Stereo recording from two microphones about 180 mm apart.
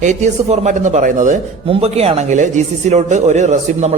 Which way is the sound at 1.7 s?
35° right (ahead or behind).